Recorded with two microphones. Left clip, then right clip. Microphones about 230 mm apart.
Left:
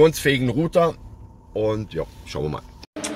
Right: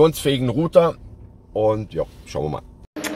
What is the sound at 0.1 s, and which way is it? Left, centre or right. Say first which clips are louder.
Speech: even; centre.